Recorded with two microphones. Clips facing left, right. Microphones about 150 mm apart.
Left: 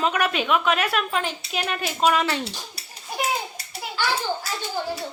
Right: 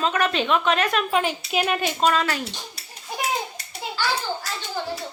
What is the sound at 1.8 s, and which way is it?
Speech, 5° left (ahead or behind).